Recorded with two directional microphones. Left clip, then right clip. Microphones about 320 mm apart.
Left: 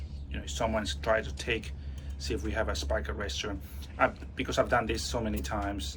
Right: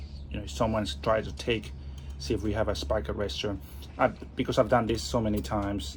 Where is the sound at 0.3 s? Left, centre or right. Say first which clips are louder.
Right 2 dB; centre.